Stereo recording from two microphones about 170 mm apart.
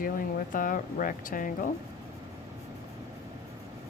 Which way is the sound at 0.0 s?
55° left (ahead or behind).